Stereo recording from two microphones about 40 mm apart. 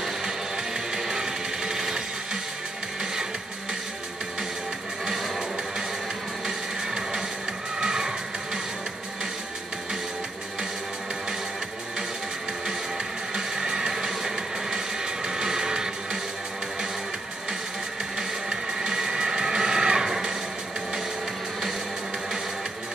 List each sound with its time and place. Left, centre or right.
0.9 s a sound: centre
5.0 s music: centre
6.4 s music: centre
12.6 s music: centre
18.1 s music: centre